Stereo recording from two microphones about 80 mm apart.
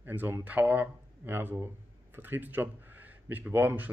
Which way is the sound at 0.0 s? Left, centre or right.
Right.